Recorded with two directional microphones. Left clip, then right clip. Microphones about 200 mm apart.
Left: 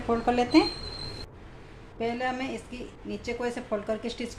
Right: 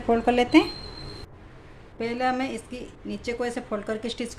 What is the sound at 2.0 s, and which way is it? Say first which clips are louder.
A woman's voice: right 4 dB; 45° right (ahead or behind).